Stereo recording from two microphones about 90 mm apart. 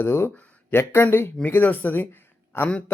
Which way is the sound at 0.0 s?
25° left (ahead or behind).